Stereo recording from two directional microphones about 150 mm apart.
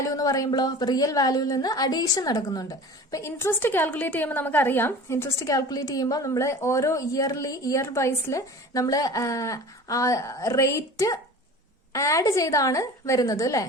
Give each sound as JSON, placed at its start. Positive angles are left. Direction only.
{"t": 0.0, "sound": "a woman's voice", "side_deg": 25}